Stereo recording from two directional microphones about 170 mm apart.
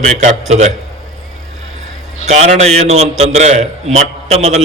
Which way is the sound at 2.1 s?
40° right (ahead or behind).